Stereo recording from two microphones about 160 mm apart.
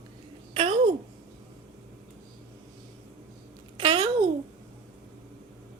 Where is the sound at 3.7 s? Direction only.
35° right (ahead or behind).